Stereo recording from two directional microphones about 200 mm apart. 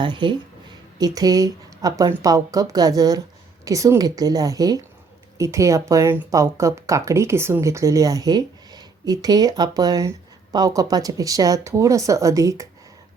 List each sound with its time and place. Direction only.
0.0 s speech: 25° right (ahead or behind)